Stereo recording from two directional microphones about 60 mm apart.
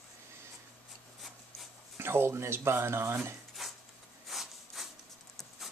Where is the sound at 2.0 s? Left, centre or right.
Right.